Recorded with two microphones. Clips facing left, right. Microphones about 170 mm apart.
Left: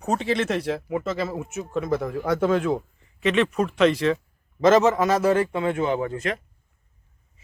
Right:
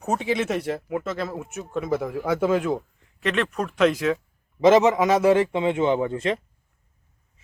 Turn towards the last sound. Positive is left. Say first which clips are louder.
# right 3 dB
turn(degrees=-30)  # may be behind; listen again after turning